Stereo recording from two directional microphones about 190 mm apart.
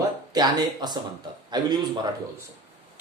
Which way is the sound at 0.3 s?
20° right (ahead or behind).